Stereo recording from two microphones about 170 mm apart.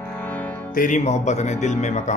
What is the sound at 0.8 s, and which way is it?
Speech, 45° left (ahead or behind).